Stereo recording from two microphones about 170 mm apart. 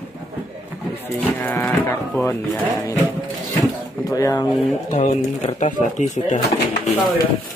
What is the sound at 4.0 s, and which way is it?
Speech, 20° left (ahead or behind).